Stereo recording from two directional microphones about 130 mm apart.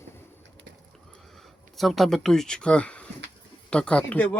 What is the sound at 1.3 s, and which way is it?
Speech, centre (ahead or behind).